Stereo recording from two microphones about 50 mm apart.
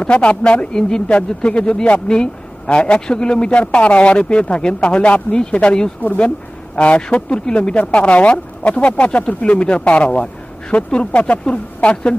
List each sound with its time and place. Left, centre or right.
0.0 s speech: left